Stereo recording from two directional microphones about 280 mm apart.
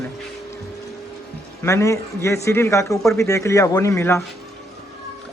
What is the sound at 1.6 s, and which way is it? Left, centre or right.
Speech, centre.